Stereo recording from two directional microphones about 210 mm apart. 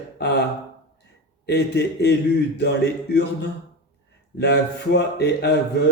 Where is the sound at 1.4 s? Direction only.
55° left (ahead or behind).